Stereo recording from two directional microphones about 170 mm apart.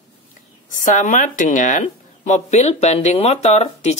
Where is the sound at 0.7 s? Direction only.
50° left (ahead or behind).